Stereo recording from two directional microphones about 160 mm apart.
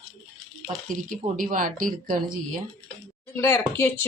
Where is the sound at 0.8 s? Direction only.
55° right (ahead or behind).